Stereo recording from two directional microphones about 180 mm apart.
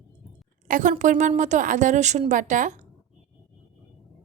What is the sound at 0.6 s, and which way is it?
A woman's voice, 45° right (ahead or behind).